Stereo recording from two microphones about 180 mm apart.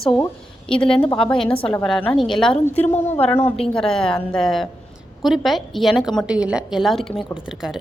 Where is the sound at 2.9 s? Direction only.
35° left (ahead or behind).